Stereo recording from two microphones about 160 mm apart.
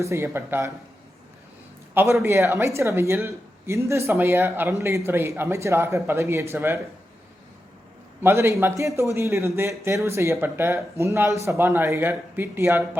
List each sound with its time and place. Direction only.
0.0 s speech: 15° right (ahead or behind)
1.9 s a man's voice: 15° right (ahead or behind)
8.2 s speech: 15° right (ahead or behind)